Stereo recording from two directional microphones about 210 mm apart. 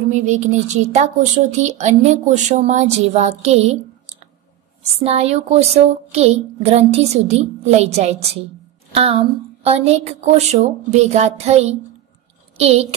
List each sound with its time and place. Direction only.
0.1 s speech: 35° right (ahead or behind)
4.9 s speech: 30° right (ahead or behind)
9.6 s a woman's voice: 30° right (ahead or behind)